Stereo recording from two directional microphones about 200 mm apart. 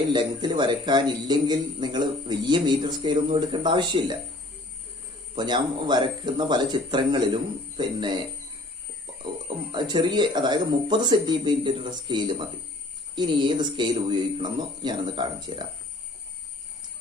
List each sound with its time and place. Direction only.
0.1 s a man's voice: 20° right (ahead or behind)
5.3 s a man's voice: 20° right (ahead or behind)